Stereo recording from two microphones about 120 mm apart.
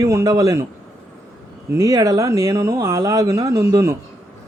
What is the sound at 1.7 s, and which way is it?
A man's voice, 30° right (ahead or behind).